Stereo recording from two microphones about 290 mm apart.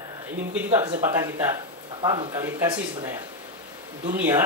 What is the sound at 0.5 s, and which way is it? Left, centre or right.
Speech, centre.